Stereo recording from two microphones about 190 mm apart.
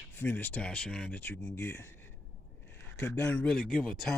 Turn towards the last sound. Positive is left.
turn(degrees=5)  # may be behind; listen again after turning